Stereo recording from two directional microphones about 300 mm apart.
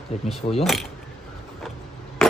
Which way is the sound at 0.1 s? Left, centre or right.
Left.